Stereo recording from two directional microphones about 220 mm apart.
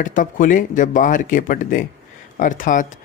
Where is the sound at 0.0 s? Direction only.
35° left (ahead or behind).